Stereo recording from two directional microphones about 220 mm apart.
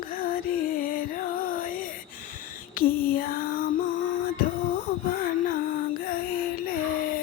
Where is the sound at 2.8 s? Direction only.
40° left (ahead or behind).